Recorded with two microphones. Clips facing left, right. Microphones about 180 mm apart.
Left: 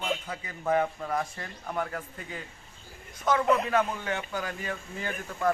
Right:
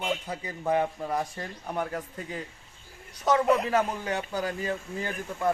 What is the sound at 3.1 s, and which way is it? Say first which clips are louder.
A man's voice: right 2 dB; 35° right (ahead or behind).